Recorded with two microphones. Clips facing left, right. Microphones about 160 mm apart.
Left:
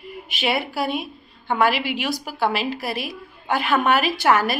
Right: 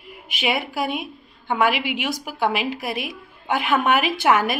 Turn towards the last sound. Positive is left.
turn(degrees=-15)  # may be behind; listen again after turning